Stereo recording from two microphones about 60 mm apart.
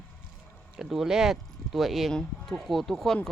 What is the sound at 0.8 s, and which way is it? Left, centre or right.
Speech, centre.